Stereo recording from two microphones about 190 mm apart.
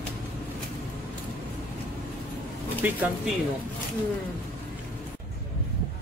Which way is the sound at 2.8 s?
10° right (ahead or behind).